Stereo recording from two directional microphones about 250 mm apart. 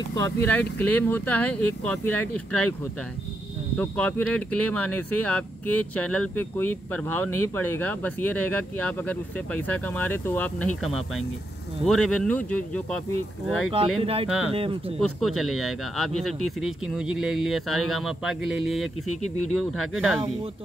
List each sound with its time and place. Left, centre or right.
0.1 s speech: centre
13.9 s speech: right
15.1 s speech: centre